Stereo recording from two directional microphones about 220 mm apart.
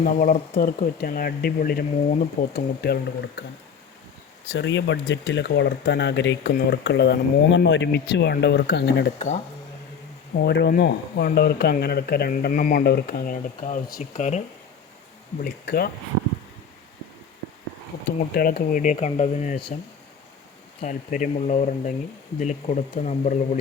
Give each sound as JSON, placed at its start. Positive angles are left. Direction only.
{"t": 0.0, "sound": "speech", "side_deg": 35}
{"t": 0.9, "sound": "speech", "side_deg": 40}
{"t": 4.4, "sound": "speech", "side_deg": 55}
{"t": 9.1, "sound": "speech", "side_deg": 30}
{"t": 10.3, "sound": "speech", "side_deg": 50}
{"t": 15.4, "sound": "speech", "side_deg": 45}
{"t": 18.3, "sound": "speech", "side_deg": 40}
{"t": 20.8, "sound": "speech", "side_deg": 35}